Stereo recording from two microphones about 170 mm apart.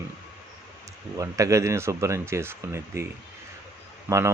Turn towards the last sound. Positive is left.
turn(degrees=-20)  # may be behind; listen again after turning